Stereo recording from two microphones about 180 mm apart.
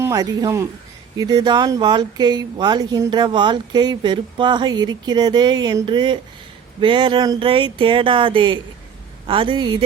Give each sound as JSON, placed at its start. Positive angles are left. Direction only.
{"t": 0.0, "sound": "speech", "side_deg": -20}